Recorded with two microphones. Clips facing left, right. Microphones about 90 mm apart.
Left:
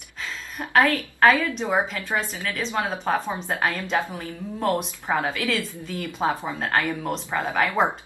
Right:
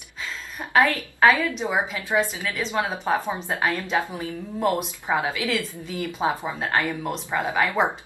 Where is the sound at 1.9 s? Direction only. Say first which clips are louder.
Right 3 dB; 15° right (ahead or behind).